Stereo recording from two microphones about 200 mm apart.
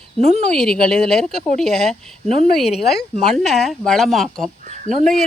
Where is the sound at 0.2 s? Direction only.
30° right (ahead or behind).